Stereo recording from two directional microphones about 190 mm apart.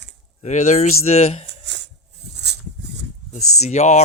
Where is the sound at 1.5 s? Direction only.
65° right (ahead or behind).